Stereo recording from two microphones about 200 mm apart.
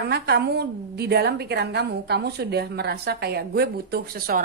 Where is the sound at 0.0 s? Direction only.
55° right (ahead or behind).